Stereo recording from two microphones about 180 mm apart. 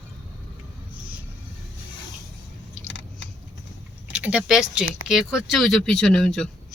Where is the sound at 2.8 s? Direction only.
90° left.